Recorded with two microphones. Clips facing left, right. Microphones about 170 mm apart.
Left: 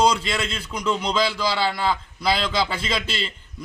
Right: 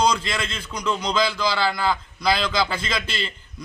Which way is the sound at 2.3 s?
25° left (ahead or behind).